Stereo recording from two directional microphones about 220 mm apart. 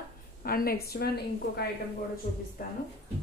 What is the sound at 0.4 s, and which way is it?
A woman's voice, 40° left (ahead or behind).